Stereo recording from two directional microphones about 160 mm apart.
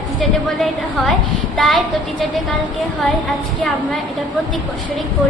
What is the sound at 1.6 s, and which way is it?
Speech, centre (ahead or behind).